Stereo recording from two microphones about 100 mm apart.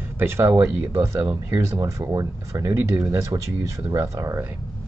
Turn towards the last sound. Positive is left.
turn(degrees=-25)  # may be behind; listen again after turning